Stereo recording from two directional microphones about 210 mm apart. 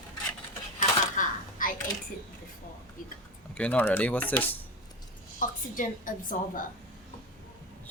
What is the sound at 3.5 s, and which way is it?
Speech, 5° left (ahead or behind).